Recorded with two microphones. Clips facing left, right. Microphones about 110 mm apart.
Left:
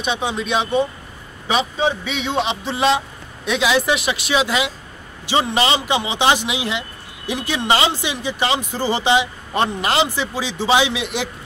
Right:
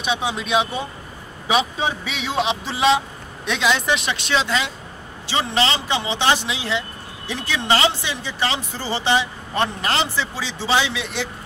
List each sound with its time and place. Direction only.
0.0 s speech: centre (ahead or behind); by 11.2 s 15° left (ahead or behind)